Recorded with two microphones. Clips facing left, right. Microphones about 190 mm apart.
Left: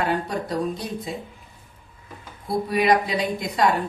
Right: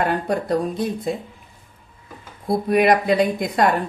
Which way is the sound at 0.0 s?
55° right (ahead or behind).